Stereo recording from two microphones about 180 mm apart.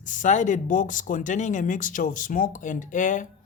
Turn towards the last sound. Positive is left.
turn(degrees=45)  # may be behind; listen again after turning